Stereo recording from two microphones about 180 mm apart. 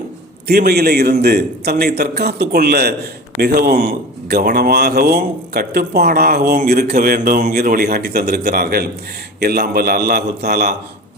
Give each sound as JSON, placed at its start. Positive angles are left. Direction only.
{"t": 0.4, "sound": "speech", "side_deg": -60}